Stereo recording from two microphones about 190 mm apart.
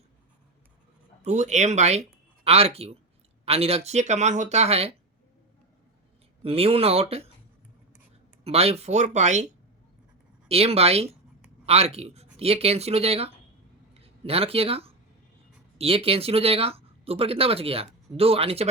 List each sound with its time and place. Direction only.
1.2 s speech: 35° right (ahead or behind)
6.4 s speech: 30° right (ahead or behind)
8.4 s speech: 35° right (ahead or behind)
10.5 s speech: 30° right (ahead or behind)